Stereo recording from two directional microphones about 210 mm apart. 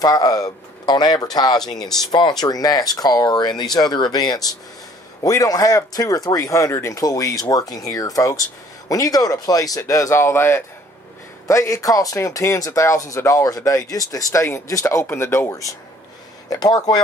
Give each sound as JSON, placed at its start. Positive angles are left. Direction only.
{"t": 0.0, "sound": "speech", "side_deg": 15}